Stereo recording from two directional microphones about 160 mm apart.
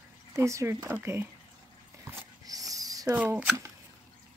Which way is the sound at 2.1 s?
20° right (ahead or behind).